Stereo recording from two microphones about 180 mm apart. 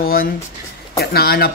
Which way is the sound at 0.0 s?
55° left (ahead or behind).